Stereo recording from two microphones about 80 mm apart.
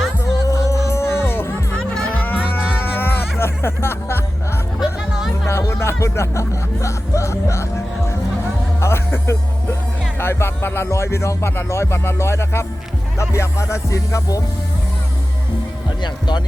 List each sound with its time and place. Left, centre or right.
0.4 s music: left
1.7 s music: centre
2.1 s music: left
4.8 s music: centre
5.5 s music: left
8.8 s speech: left
10.2 s music: left
16.0 s speech: left